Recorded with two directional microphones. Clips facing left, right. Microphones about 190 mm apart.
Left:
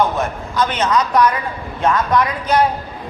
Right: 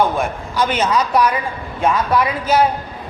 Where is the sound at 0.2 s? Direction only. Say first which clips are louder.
Even; 10° right (ahead or behind).